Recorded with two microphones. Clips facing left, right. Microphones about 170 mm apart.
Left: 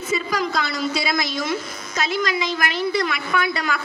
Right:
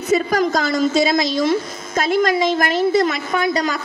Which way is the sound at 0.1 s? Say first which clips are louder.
Right 7 dB; 45° right (ahead or behind).